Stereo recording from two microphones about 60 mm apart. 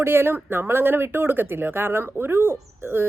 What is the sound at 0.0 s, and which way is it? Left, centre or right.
Speech, right.